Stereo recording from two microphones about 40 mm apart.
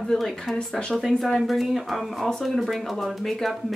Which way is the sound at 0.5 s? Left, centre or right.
Left.